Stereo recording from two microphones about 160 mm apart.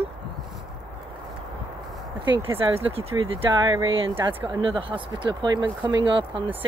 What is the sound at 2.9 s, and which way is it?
Speech, 35° right (ahead or behind).